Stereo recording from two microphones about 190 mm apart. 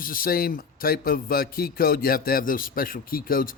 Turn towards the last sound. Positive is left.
turn(degrees=50)  # may be behind; listen again after turning